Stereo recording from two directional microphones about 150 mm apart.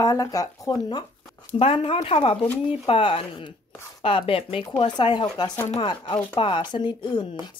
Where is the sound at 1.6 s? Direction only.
40° left (ahead or behind).